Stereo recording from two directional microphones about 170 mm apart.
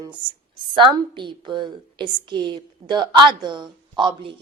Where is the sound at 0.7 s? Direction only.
30° right (ahead or behind).